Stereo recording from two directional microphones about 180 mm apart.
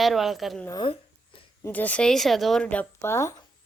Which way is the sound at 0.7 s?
25° left (ahead or behind).